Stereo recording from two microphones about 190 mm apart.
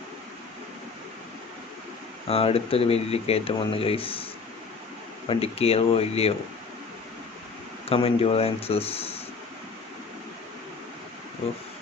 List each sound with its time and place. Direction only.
2.2 s speech: 30° left (ahead or behind)
5.3 s speech: 30° left (ahead or behind)
7.9 s speech: 30° left (ahead or behind)